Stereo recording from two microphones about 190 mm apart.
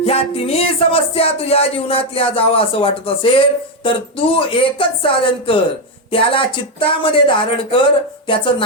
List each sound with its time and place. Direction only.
0.0 s speech: 30° left (ahead or behind)